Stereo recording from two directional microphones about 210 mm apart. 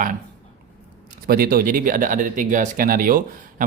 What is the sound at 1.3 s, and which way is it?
Speech, 45° right (ahead or behind).